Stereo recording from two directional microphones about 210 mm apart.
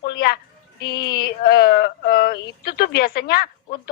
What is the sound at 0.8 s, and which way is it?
A woman's voice, 50° left (ahead or behind).